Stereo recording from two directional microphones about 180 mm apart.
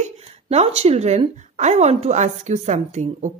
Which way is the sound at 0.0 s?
35° right (ahead or behind).